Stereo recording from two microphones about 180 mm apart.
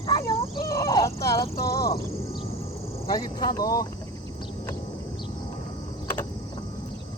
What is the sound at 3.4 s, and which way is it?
Speech, 20° left (ahead or behind).